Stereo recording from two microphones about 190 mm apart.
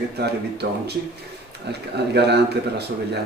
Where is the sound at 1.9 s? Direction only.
60° right (ahead or behind).